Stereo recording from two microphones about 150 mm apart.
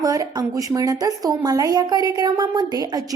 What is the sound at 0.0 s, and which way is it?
A woman's voice, 25° right (ahead or behind).